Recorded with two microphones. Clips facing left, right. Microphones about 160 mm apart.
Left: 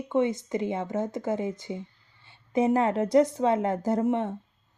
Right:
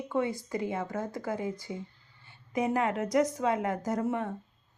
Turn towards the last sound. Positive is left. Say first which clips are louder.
# left 5 dB
turn(degrees=20)  # may be behind; listen again after turning